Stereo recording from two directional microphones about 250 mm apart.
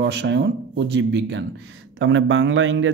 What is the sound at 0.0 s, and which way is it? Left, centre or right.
A man's voice, right.